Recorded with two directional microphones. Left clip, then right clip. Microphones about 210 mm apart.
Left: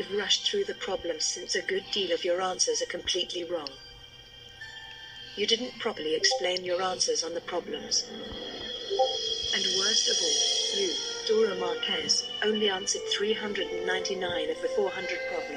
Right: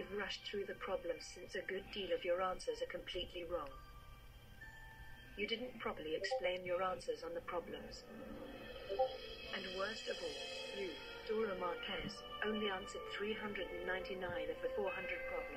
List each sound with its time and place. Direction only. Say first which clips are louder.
0.0 s speech: left 17 dB; 35° left (ahead or behind)
5.4 s speech: left 14 dB; 30° left (ahead or behind)